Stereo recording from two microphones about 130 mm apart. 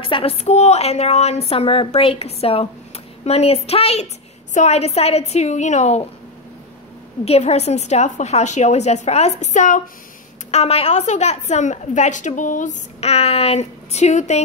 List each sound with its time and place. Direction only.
0.0 s a woman's voice: 45° left (ahead or behind); by 6.0 s 60° left (ahead or behind)
7.2 s a woman's voice: 55° left (ahead or behind)
10.5 s a woman's voice: 50° left (ahead or behind)